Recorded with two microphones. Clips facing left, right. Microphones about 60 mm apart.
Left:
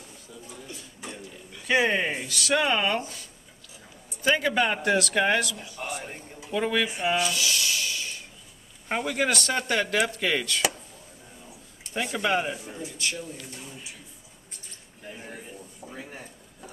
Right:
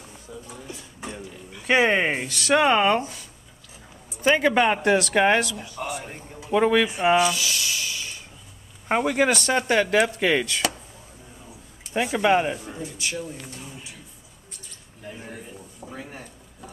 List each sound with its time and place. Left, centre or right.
0.5 s a man's voice: right
1.6 s speech: right
4.2 s speech: right
5.9 s a sound: centre
6.5 s speech: right
7.2 s music: centre
8.8 s speech: right
12.0 s speech: centre
15.0 s a sound: centre